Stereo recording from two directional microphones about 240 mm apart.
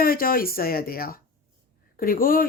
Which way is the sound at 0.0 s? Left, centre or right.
Left.